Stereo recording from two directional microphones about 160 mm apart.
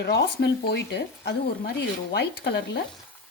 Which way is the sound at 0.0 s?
90° left.